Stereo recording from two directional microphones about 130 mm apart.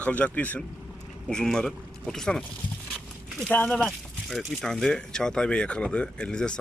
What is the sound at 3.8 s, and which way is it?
Speech, centre (ahead or behind).